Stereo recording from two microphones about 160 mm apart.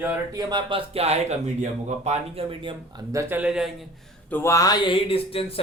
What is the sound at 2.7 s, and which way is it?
Speech, 20° right (ahead or behind).